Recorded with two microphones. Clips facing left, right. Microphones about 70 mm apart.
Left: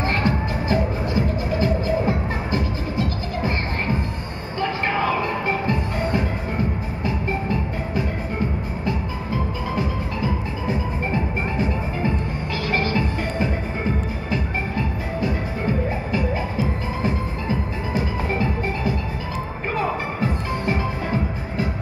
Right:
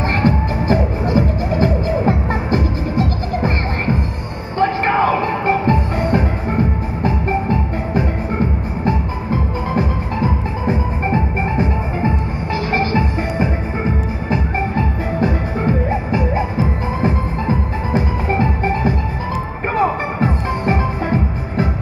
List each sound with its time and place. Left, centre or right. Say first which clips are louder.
0.1 s music: right 5 dB; right